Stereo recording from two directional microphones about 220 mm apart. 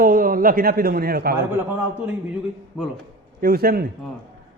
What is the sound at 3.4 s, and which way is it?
Speech, 45° right (ahead or behind).